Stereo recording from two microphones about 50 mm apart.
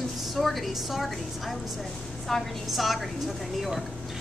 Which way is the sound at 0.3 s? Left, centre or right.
Centre.